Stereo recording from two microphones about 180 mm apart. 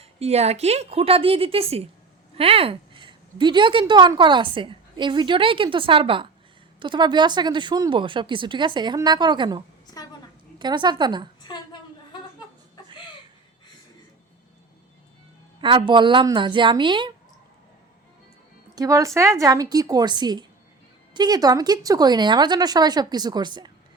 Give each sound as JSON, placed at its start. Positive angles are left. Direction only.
{"t": 0.0, "sound": "a woman's voice", "side_deg": -35}
{"t": 9.8, "sound": "a sound", "side_deg": 20}
{"t": 10.6, "sound": "a woman's voice", "side_deg": -25}
{"t": 11.4, "sound": "a sound", "side_deg": 25}
{"t": 15.6, "sound": "a woman's voice", "side_deg": -25}
{"t": 18.7, "sound": "a woman's voice", "side_deg": -20}